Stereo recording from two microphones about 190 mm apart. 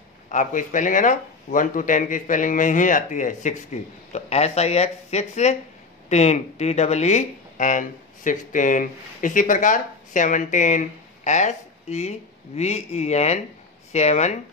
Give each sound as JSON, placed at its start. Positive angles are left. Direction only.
{"t": 0.3, "sound": "speech", "side_deg": 45}